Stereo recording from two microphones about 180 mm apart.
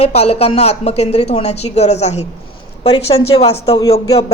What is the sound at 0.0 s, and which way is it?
A woman's voice, 35° left (ahead or behind).